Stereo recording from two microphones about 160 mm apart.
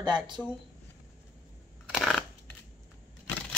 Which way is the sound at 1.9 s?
Centre (ahead or behind).